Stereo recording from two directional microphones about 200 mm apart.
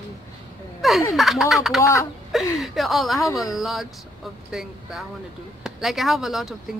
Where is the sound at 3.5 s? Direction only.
Centre (ahead or behind).